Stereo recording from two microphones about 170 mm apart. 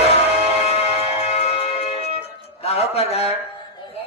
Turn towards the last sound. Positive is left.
turn(degrees=40)  # may be behind; listen again after turning